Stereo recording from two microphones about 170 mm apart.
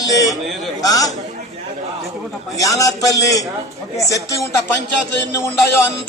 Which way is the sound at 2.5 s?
20° left (ahead or behind).